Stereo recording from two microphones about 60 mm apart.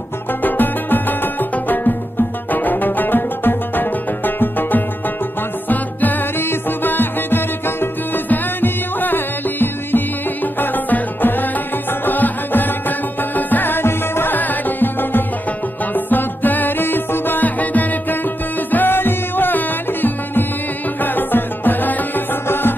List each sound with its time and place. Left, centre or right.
0.3 s music: left